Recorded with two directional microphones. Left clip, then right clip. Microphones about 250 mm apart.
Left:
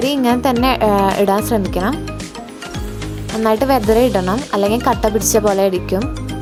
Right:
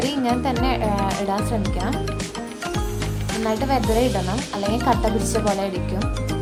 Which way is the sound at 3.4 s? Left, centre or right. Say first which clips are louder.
Left 8 dB; left.